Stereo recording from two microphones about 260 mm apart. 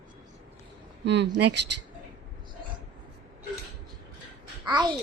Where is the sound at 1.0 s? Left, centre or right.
Right.